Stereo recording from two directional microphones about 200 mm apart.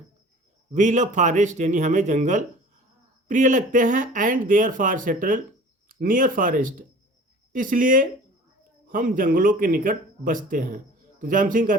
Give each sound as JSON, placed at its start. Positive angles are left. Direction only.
{"t": 0.7, "sound": "speech", "side_deg": -35}